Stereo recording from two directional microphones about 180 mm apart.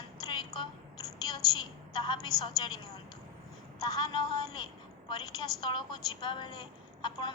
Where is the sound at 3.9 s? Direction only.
25° left (ahead or behind).